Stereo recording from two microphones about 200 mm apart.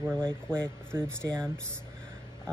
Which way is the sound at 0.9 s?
15° right (ahead or behind).